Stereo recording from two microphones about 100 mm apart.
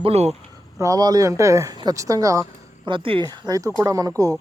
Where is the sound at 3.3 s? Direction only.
40° right (ahead or behind).